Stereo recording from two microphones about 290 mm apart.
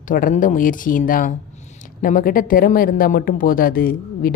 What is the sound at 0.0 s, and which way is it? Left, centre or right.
Speech, left.